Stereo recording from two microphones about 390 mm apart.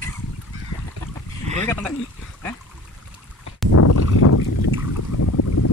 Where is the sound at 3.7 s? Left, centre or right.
Left.